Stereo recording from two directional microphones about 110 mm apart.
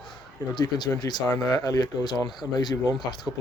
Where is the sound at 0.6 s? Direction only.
40° left (ahead or behind).